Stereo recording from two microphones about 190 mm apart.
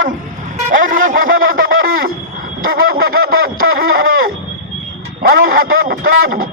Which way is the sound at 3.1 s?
90° right.